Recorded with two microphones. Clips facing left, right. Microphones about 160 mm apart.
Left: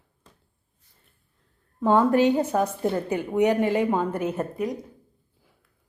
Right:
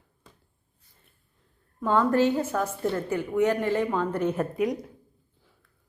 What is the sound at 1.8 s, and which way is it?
A woman's voice, 15° left (ahead or behind).